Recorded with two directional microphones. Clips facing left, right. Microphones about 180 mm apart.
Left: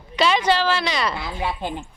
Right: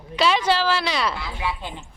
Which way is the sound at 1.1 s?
50° left (ahead or behind).